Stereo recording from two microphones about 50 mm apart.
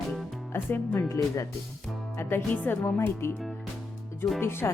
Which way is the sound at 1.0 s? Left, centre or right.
Left.